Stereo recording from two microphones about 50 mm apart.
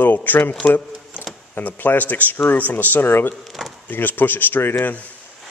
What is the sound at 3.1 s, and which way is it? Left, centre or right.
Speech, left.